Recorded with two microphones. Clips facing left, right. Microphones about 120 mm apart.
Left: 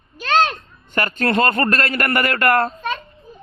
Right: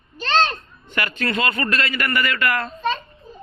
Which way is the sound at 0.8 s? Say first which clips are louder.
Left 4 dB; 45° left (ahead or behind).